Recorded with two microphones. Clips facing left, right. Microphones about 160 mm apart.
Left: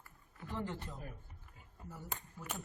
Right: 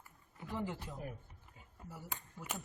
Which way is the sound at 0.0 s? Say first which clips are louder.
Right 1 dB; 15° right (ahead or behind).